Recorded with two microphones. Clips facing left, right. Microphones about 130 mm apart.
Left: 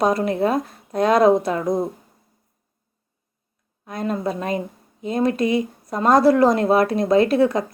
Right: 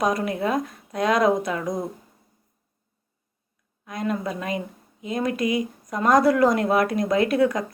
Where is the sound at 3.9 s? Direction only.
30° left (ahead or behind).